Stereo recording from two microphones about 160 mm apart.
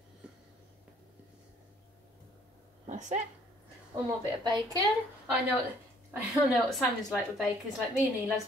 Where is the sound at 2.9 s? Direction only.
50° right (ahead or behind).